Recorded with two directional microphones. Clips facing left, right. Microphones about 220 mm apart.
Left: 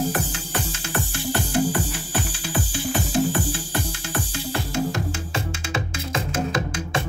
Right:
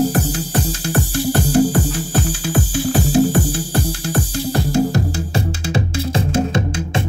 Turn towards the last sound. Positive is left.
turn(degrees=-30)  # may be behind; listen again after turning